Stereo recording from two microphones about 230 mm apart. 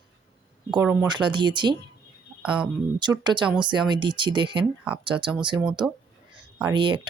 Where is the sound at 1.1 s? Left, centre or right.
Centre.